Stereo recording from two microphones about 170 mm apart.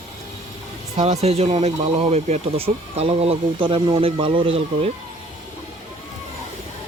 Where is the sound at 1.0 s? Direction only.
35° right (ahead or behind).